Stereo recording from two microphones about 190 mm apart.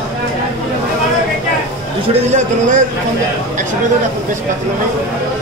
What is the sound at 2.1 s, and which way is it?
Speech, 40° right (ahead or behind).